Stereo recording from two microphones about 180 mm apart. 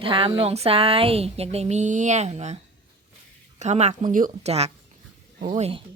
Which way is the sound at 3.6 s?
40° right (ahead or behind).